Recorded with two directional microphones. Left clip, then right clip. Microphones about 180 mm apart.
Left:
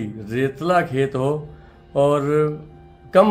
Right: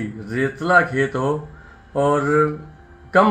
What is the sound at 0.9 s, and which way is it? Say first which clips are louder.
Speech: even; 25° left (ahead or behind).